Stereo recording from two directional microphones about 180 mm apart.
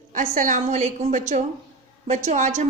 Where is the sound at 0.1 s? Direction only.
50° right (ahead or behind).